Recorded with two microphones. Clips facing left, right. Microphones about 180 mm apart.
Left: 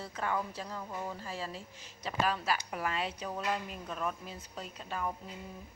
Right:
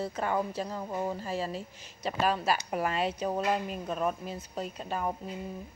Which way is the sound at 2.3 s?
30° right (ahead or behind).